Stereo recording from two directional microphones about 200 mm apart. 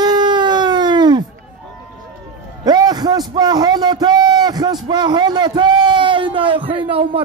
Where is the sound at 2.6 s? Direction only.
20° right (ahead or behind).